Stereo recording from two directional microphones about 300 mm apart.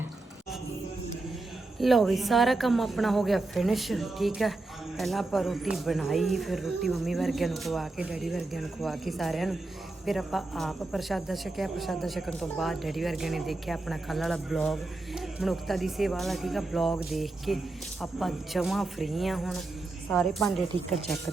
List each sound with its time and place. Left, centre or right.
1.8 s a woman's voice: centre